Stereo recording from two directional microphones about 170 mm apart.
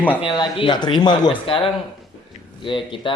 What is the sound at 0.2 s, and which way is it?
Speech, 30° left (ahead or behind).